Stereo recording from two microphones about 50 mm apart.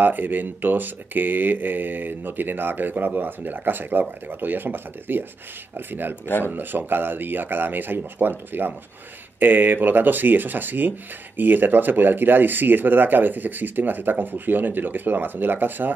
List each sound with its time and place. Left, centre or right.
0.0 s speech: right